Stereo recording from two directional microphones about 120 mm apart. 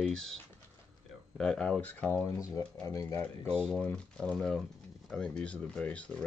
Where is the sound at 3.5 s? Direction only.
5° left (ahead or behind).